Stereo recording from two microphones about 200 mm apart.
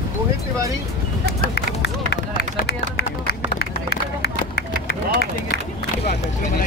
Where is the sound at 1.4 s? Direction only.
55° left (ahead or behind).